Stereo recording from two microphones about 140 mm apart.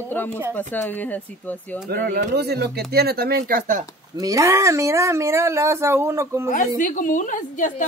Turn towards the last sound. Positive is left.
turn(degrees=65)  # may be behind; listen again after turning